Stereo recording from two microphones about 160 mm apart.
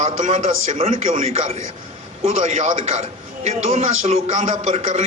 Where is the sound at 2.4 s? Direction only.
50° right (ahead or behind).